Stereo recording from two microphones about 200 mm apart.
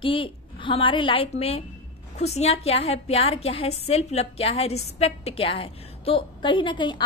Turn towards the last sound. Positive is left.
turn(degrees=25)  # may be behind; listen again after turning